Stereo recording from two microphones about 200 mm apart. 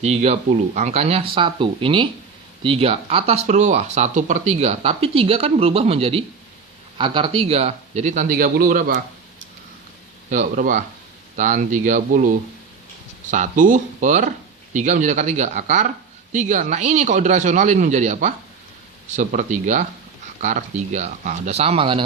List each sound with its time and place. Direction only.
0.0 s speech: 35° right (ahead or behind)
10.2 s speech: 40° right (ahead or behind)